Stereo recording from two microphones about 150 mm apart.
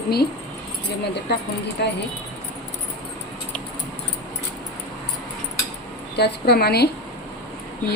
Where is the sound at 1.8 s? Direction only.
90° left.